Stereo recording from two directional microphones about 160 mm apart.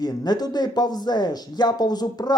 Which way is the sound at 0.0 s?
25° left (ahead or behind).